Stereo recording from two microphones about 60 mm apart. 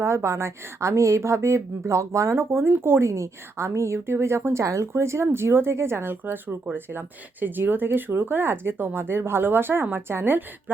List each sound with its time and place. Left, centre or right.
0.0 s speech: right